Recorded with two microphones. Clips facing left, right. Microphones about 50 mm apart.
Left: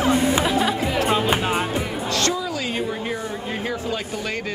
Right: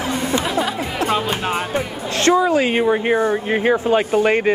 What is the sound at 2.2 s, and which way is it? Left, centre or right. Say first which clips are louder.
Speech: right 9 dB; right.